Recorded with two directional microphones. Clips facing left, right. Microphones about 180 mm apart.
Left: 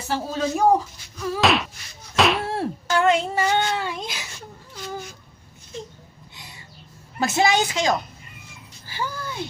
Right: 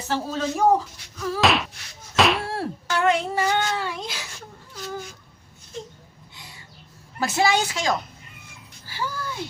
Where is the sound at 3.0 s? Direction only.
25° left (ahead or behind).